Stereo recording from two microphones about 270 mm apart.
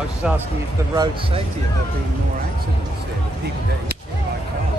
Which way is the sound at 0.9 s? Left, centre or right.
Centre.